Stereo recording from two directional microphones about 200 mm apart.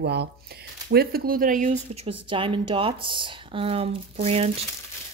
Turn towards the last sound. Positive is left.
turn(degrees=-30)  # may be behind; listen again after turning